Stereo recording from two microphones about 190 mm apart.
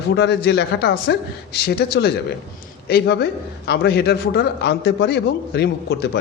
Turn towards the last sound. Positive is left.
turn(degrees=65)  # may be behind; listen again after turning